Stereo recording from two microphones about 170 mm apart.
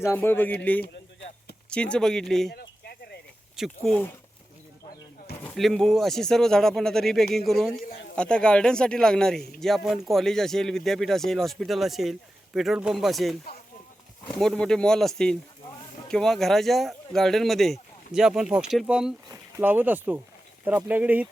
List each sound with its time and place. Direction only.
0.0 s speech: 15° left (ahead or behind)
1.7 s speech: 5° left (ahead or behind)
2.5 s a sound: 75° left (ahead or behind)
3.5 s speech: centre (ahead or behind)
5.4 s speech: 5° left (ahead or behind)
14.3 s speech: 5° left (ahead or behind)